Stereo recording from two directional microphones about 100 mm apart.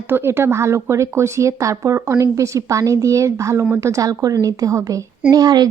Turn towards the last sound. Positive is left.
turn(degrees=-45)  # may be behind; listen again after turning